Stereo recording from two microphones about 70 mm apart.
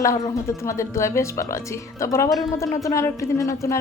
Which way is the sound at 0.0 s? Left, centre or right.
Left.